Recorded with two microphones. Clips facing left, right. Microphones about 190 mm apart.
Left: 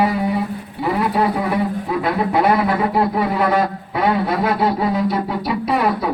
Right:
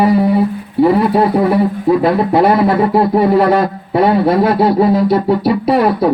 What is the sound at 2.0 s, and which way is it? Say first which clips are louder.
Speech: right 3 dB; 35° right (ahead or behind).